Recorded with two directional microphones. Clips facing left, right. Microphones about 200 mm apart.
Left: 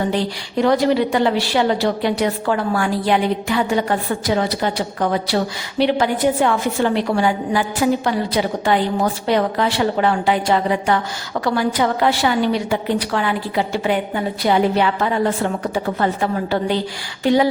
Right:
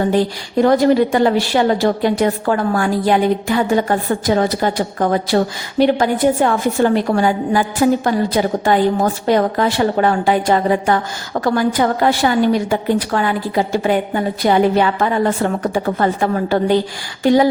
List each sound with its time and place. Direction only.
0.1 s a woman's voice: 45° right (ahead or behind)